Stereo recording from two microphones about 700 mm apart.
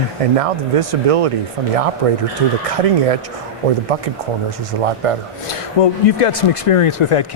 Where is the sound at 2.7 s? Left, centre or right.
Right.